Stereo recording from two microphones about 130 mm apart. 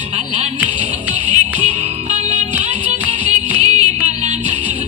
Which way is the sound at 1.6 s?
60° right (ahead or behind).